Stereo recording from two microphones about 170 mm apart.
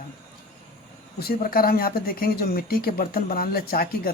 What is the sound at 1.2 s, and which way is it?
Speech, 60° left (ahead or behind).